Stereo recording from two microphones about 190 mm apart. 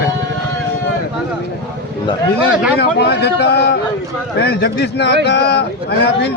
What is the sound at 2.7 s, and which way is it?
A man's voice, 60° left (ahead or behind).